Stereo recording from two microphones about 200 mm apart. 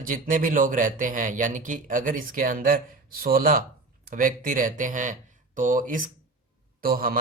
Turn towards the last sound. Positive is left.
turn(degrees=-45)  # may be behind; listen again after turning